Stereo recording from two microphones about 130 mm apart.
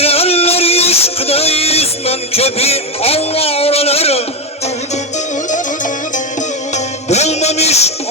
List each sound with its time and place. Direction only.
0.0 s music: 50° left (ahead or behind)
5.5 s music: 75° left (ahead or behind)
6.7 s music: 60° left (ahead or behind)